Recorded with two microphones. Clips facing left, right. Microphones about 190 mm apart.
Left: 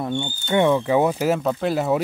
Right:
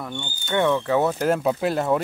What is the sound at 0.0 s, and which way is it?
Speech, 25° left (ahead or behind).